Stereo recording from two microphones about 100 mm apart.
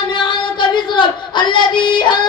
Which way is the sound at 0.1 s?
50° left (ahead or behind).